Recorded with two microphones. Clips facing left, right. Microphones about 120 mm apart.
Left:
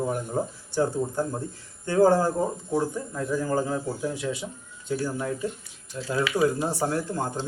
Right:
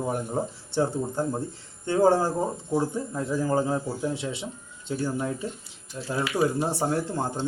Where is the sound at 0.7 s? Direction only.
25° right (ahead or behind).